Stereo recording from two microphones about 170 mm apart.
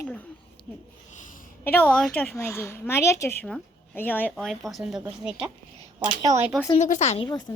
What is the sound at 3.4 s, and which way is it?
Speech, 5° left (ahead or behind).